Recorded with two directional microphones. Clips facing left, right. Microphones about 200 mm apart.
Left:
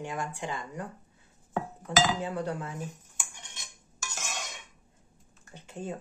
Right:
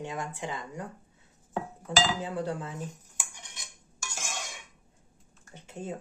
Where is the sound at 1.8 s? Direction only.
30° right (ahead or behind).